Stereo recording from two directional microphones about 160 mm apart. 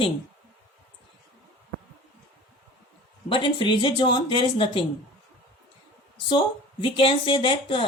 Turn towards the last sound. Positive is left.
turn(degrees=35)  # may be behind; listen again after turning